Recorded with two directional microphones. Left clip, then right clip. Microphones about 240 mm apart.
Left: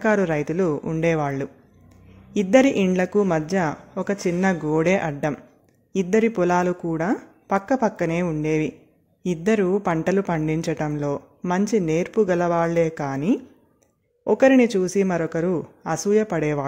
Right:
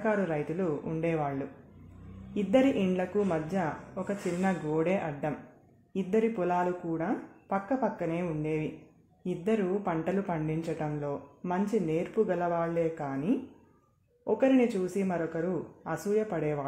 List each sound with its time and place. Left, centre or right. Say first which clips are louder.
0.0 s speech: left 9 dB; left